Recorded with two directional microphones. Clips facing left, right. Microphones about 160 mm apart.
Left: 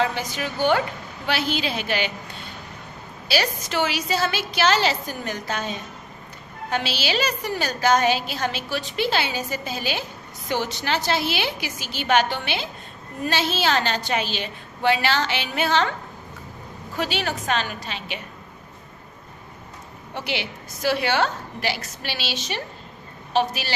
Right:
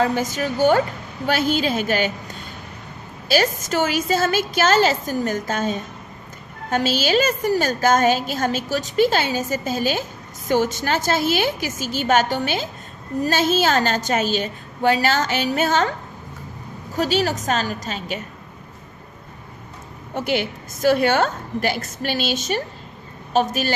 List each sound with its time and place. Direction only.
0.0 s a woman's voice: 45° right (ahead or behind)
16.9 s a woman's voice: 40° right (ahead or behind)
20.1 s a woman's voice: 45° right (ahead or behind)